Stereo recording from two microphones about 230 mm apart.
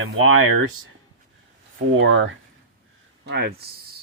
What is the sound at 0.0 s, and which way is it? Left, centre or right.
Speech, right.